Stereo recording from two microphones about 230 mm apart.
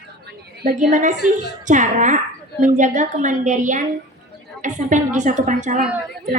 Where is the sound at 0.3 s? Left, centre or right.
Right.